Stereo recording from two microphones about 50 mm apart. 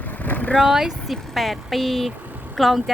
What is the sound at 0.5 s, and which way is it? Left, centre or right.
Speech, centre.